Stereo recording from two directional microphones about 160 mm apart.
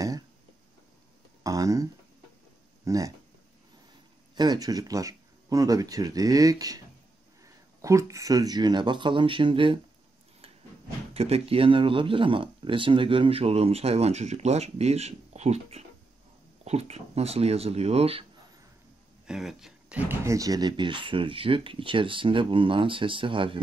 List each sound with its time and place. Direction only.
1.4 s a sound: 20° right (ahead or behind)
2.8 s speech: 20° right (ahead or behind)
4.4 s speech: 25° right (ahead or behind)
7.8 s speech: 20° right (ahead or behind)
11.1 s speech: 40° right (ahead or behind)
19.2 s speech: 5° right (ahead or behind); by 23.6 s 30° right (ahead or behind)